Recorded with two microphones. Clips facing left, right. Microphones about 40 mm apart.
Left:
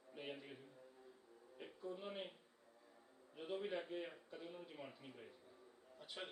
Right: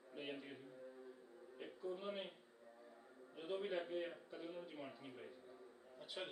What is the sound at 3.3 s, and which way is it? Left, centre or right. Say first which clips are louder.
A man's voice: right 1 dB; centre.